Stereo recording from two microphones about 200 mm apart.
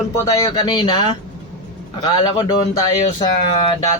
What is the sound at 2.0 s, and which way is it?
Speech, 20° left (ahead or behind).